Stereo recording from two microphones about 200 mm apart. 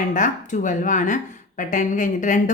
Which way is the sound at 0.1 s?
40° left (ahead or behind).